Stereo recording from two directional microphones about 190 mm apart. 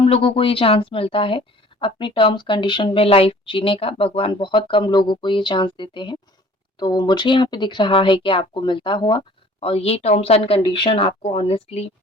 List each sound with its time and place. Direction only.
0.0 s speech: 30° left (ahead or behind)